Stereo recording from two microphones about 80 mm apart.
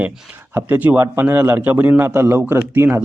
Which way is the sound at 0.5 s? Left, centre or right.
Right.